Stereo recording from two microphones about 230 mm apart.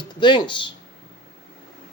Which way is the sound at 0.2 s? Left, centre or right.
Centre.